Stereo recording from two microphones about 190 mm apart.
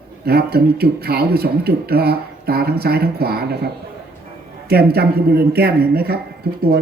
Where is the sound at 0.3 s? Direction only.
55° right (ahead or behind).